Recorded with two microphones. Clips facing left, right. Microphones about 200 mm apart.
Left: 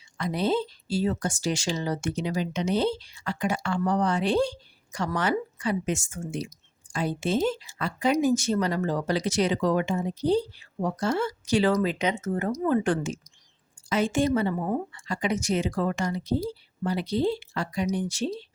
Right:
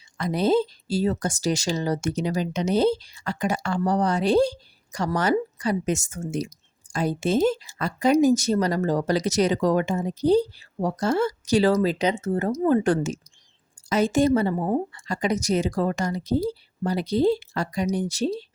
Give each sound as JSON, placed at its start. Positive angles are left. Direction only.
{"t": 0.2, "sound": "speech", "side_deg": -40}